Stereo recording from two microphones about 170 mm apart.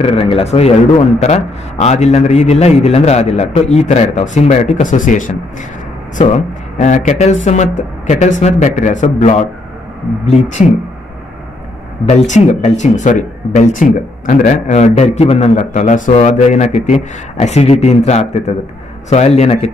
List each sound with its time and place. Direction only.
0.0 s a man's voice: 35° left (ahead or behind)
12.3 s a man's voice: 45° left (ahead or behind)